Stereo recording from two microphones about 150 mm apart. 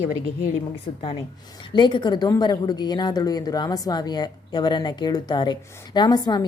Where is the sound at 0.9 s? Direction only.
35° left (ahead or behind).